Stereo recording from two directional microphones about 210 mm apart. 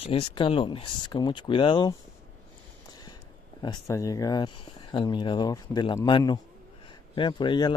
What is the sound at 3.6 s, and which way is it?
Speech, 20° left (ahead or behind).